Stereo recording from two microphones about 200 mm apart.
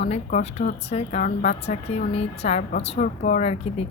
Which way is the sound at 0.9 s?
35° left (ahead or behind).